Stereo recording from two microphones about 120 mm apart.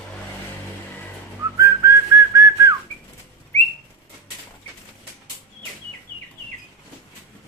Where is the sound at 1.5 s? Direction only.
25° right (ahead or behind).